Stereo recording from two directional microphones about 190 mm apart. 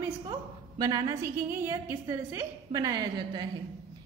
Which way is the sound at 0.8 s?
20° right (ahead or behind).